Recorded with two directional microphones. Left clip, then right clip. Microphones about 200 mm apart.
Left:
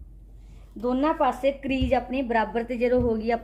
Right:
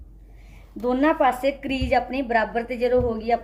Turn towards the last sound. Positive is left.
turn(degrees=25)  # may be behind; listen again after turning